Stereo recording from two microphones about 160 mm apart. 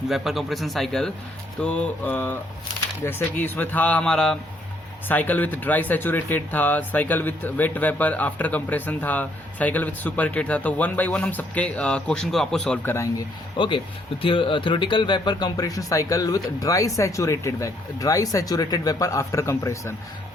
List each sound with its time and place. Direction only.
0.1 s a man's voice: centre (ahead or behind); by 13.2 s 15° left (ahead or behind)
13.6 s speech: 30° left (ahead or behind)